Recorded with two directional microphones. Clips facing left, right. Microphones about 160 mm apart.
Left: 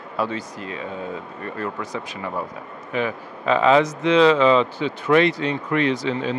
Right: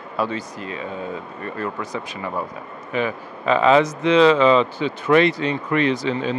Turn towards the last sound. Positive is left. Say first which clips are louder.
# right 1 dB
turn(degrees=-15)  # may be behind; listen again after turning